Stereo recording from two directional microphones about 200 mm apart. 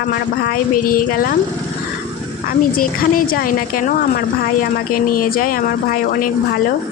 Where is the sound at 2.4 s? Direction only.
45° left (ahead or behind).